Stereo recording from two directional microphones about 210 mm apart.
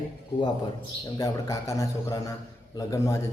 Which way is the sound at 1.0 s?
15° left (ahead or behind).